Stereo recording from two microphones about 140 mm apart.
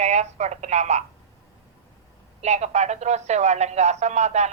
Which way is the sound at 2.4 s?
55° right (ahead or behind).